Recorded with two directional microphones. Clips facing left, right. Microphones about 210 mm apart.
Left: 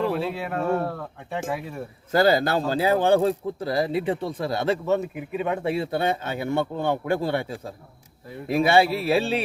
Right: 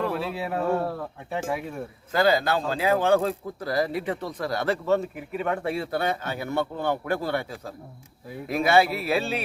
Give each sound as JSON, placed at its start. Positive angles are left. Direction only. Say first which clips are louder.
{"t": 0.1, "sound": "speech", "louder": "left 2 dB", "side_deg": 0}
{"t": 2.1, "sound": "a man's voice", "louder": "left 2 dB", "side_deg": 40}